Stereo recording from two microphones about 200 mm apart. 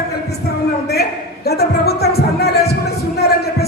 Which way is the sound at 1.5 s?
50° left (ahead or behind).